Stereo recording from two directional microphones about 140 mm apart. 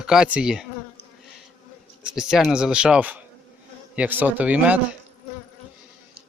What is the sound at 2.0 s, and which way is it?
Speech, 5° right (ahead or behind).